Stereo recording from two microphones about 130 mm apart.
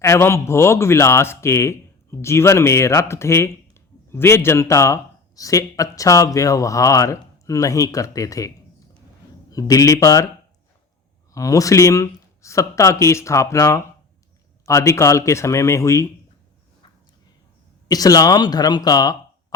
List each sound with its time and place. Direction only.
0.0 s speech: 20° left (ahead or behind)
11.3 s speech: 25° left (ahead or behind)
17.8 s speech: 30° left (ahead or behind)